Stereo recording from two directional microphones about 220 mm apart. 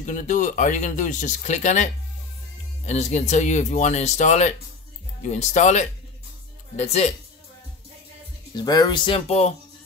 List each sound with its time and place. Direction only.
0.0 s speech: 35° left (ahead or behind)
8.5 s speech: 20° left (ahead or behind)